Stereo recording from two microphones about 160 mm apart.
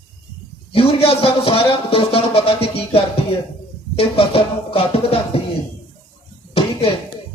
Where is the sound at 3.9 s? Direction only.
35° left (ahead or behind).